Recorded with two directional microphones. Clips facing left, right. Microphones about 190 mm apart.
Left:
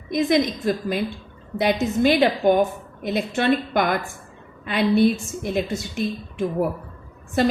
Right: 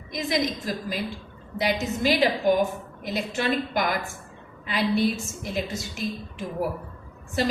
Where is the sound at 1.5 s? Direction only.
55° left (ahead or behind).